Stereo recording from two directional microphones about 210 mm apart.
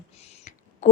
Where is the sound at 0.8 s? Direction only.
35° left (ahead or behind).